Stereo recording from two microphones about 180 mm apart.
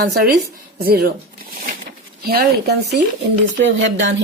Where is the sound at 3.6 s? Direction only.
90° right.